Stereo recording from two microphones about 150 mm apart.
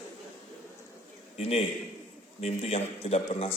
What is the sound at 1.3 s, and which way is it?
A man's voice, 45° left (ahead or behind).